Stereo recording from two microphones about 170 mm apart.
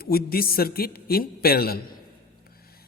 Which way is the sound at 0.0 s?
60° left (ahead or behind).